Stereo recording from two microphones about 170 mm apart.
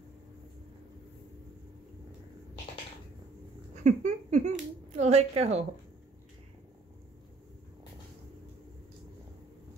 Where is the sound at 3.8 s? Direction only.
45° right (ahead or behind).